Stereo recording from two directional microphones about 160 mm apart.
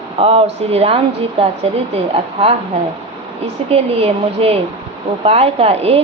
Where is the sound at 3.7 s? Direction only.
40° right (ahead or behind).